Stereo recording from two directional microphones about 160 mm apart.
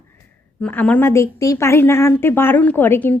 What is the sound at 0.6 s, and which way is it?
A woman's voice, 10° left (ahead or behind).